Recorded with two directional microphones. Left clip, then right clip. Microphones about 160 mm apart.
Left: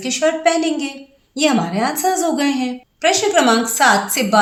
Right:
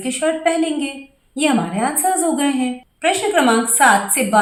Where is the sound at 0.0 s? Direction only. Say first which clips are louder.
Left 2 dB; 40° left (ahead or behind).